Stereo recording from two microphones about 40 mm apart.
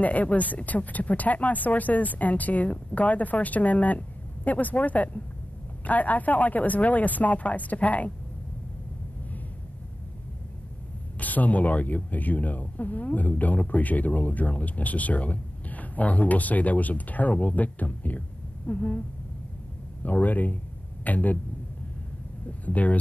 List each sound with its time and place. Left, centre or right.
0.0 s speech: left
11.1 s speech: left
22.5 s speech: left